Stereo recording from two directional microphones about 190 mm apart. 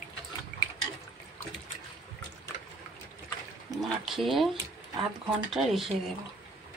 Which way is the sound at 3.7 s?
20° right (ahead or behind).